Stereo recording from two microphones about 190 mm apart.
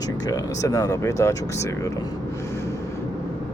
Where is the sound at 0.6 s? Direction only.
15° left (ahead or behind).